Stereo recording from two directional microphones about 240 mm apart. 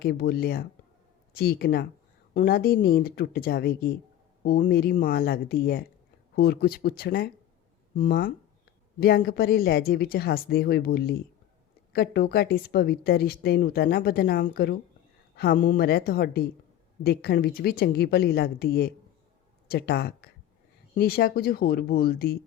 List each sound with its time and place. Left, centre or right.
0.0 s speech: left